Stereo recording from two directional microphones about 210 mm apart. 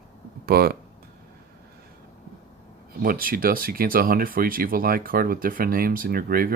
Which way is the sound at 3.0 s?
45° right (ahead or behind).